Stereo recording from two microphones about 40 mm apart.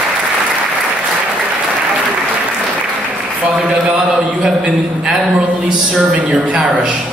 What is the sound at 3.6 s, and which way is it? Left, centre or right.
A man's voice, right.